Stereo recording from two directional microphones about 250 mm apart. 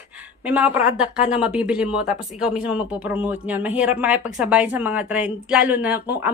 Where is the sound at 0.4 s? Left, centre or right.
Centre.